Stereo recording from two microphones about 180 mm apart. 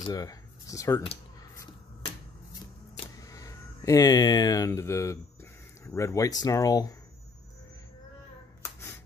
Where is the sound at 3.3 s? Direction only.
20° left (ahead or behind).